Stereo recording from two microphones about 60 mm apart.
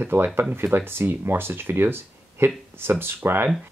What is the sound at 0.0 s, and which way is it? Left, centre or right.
Speech, right.